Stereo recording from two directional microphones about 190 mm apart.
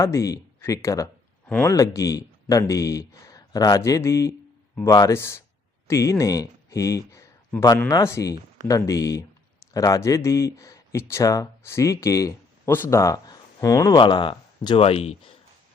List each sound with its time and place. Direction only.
0.0 s speech: 15° left (ahead or behind)